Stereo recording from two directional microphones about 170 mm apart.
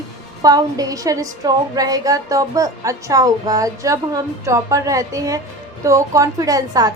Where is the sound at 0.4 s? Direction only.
20° right (ahead or behind).